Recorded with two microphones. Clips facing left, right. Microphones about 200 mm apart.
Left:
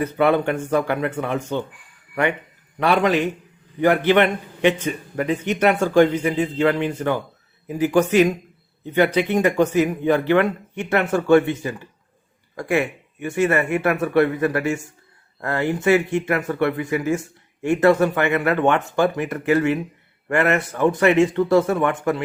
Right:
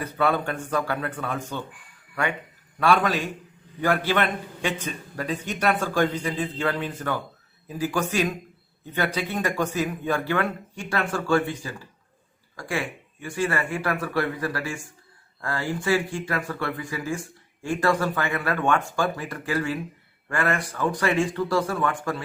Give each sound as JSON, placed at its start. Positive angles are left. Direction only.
{"t": 0.2, "sound": "speech", "side_deg": 20}
{"t": 2.7, "sound": "speech", "side_deg": 20}
{"t": 13.2, "sound": "speech", "side_deg": 25}